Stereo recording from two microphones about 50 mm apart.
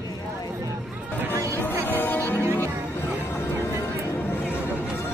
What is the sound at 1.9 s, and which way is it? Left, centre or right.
Music, left.